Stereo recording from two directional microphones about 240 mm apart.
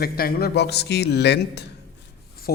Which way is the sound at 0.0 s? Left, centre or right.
Left.